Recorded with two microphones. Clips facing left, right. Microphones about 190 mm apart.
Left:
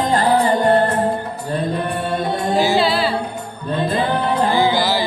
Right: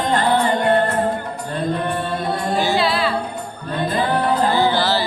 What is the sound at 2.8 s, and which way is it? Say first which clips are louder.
Music: left 2 dB; 30° left (ahead or behind).